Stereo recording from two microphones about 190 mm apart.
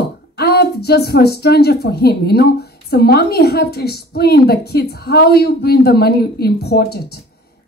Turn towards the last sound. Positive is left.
turn(degrees=55)  # may be behind; listen again after turning